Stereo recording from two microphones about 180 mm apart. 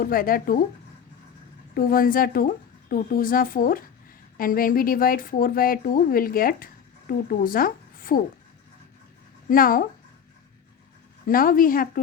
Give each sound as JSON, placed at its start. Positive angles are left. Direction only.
{"t": 0.0, "sound": "a woman's voice", "side_deg": 55}
{"t": 1.7, "sound": "a woman's voice", "side_deg": 50}
{"t": 9.5, "sound": "a woman's voice", "side_deg": 50}
{"t": 11.3, "sound": "a woman's voice", "side_deg": 50}